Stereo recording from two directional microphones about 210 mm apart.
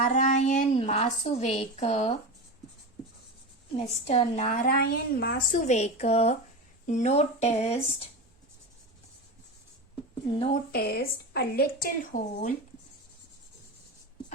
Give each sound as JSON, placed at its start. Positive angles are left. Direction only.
{"t": 0.1, "sound": "a woman's voice", "side_deg": 35}
{"t": 3.8, "sound": "a woman's voice", "side_deg": 30}
{"t": 10.5, "sound": "a woman's voice", "side_deg": 50}